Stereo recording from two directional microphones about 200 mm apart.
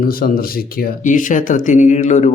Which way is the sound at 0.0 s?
45° left (ahead or behind).